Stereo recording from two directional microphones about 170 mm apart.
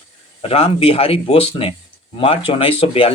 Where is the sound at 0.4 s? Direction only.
35° left (ahead or behind).